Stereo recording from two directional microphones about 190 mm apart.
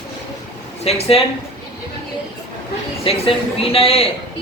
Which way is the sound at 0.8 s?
30° left (ahead or behind).